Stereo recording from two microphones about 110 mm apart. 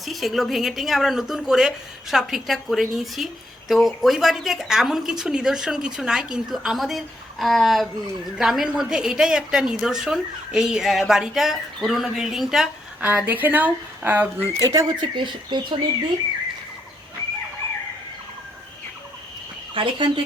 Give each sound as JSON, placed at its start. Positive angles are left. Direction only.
{"t": 0.0, "sound": "speech", "side_deg": 0}
{"t": 13.0, "sound": "speech", "side_deg": -15}
{"t": 14.6, "sound": "speech", "side_deg": -35}
{"t": 15.0, "sound": "speech", "side_deg": -45}
{"t": 19.7, "sound": "speech", "side_deg": -50}